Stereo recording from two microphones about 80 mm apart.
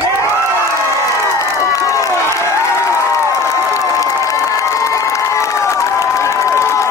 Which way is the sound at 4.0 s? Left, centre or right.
Left.